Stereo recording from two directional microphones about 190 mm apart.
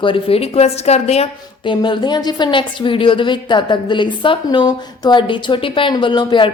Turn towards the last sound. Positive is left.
turn(degrees=25)  # may be behind; listen again after turning